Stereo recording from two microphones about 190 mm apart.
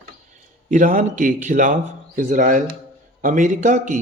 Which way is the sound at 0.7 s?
40° right (ahead or behind).